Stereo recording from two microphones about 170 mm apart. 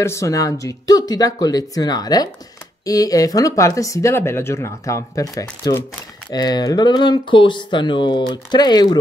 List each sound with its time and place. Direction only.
0.0 s speech: 15° left (ahead or behind)